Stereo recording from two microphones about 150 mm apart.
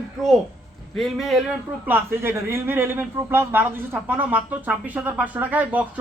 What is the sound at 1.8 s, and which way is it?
A man's voice, 15° right (ahead or behind).